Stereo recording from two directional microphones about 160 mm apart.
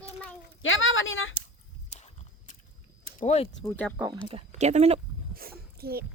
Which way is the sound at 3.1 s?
45° left (ahead or behind).